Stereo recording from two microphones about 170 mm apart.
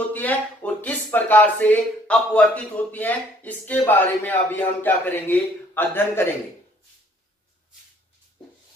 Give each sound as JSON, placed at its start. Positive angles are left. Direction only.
{"t": 0.1, "sound": "speech", "side_deg": 10}